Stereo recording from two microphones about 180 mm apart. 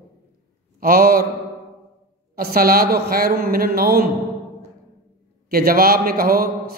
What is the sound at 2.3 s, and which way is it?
A man's voice, 55° right (ahead or behind).